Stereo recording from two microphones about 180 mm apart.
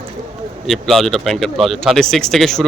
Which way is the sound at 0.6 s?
Centre (ahead or behind).